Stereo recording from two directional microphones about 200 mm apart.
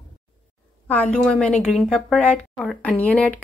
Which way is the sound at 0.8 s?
5° left (ahead or behind).